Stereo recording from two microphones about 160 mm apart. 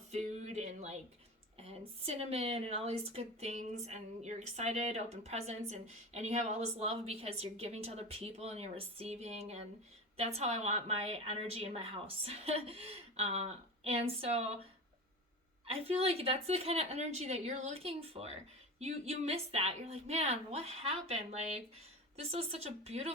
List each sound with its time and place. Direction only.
0.1 s music: 45° right (ahead or behind)
1.5 s a woman's voice: 40° right (ahead or behind)
15.6 s a woman's voice: 40° right (ahead or behind)